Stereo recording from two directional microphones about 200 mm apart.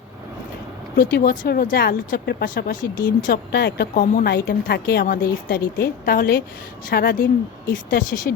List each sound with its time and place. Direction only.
0.9 s a woman's voice: 50° left (ahead or behind)